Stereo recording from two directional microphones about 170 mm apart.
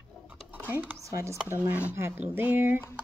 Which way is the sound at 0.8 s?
15° right (ahead or behind).